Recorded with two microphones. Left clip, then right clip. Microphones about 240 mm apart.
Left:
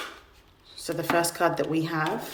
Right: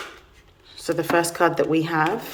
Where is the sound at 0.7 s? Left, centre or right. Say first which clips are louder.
Right 4 dB; centre.